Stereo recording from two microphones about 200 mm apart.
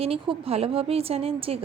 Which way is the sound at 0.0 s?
30° right (ahead or behind).